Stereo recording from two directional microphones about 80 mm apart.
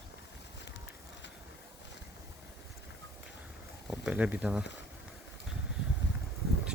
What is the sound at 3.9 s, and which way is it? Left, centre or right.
Speech, centre.